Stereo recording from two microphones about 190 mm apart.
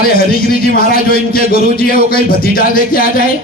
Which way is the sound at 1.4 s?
50° left (ahead or behind).